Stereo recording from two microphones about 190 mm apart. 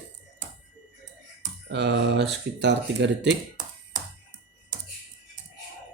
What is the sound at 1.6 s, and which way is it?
Speech, 60° right (ahead or behind).